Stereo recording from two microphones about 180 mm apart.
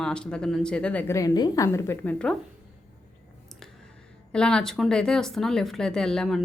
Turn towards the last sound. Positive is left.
turn(degrees=0)  # may be behind; listen again after turning